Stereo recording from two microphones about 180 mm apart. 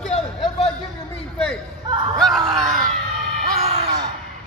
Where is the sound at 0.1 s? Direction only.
35° left (ahead or behind).